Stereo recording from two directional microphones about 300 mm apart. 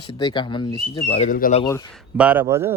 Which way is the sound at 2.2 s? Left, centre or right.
Centre.